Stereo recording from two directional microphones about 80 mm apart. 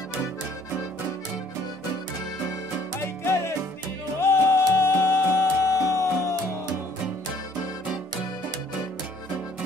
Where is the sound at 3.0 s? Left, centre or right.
Left.